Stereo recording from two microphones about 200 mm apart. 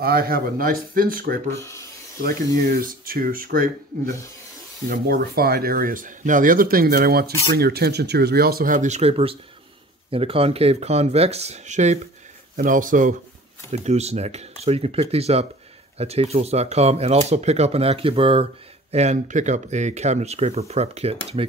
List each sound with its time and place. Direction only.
0.0 s speech: 50° right (ahead or behind); by 21.2 s 30° right (ahead or behind)